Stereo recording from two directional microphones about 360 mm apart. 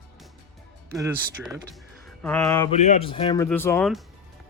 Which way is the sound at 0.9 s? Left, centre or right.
Centre.